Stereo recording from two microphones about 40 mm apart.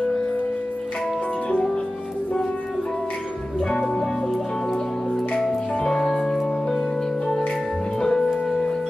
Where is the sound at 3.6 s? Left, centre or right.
Centre.